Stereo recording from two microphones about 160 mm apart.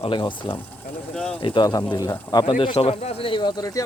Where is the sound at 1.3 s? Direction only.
30° left (ahead or behind).